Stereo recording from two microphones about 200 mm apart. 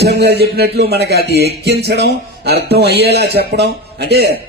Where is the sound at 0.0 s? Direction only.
55° right (ahead or behind).